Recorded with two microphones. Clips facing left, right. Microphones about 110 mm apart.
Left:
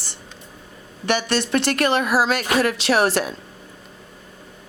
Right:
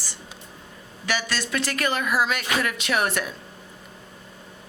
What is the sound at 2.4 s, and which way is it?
Music, 35° left (ahead or behind).